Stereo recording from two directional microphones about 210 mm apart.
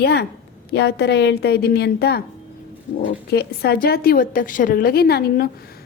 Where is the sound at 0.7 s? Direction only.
50° left (ahead or behind).